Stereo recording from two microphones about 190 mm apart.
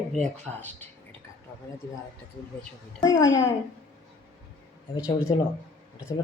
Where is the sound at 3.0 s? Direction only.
20° left (ahead or behind).